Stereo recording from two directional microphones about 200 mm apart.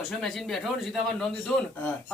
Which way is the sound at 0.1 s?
Centre (ahead or behind).